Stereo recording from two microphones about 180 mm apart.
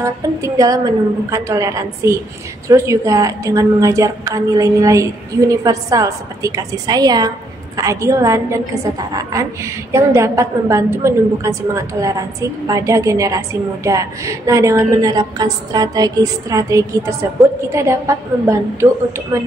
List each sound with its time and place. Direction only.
0.0 s a woman's voice: 15° right (ahead or behind)
19.3 s a woman's voice: 15° right (ahead or behind)